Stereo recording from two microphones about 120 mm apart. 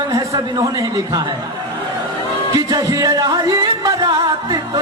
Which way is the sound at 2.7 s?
30° right (ahead or behind).